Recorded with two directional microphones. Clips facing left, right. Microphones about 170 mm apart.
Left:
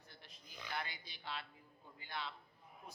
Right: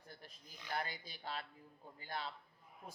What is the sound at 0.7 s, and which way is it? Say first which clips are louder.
A man's voice: right 4 dB; 45° right (ahead or behind).